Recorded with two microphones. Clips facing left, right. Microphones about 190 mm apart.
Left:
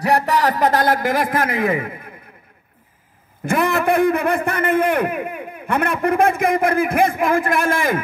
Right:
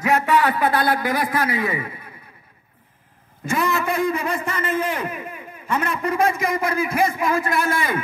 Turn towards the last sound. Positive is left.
turn(degrees=50)  # may be behind; listen again after turning